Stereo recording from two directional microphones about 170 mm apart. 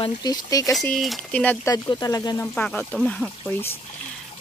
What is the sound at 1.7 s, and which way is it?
Speech, 20° left (ahead or behind).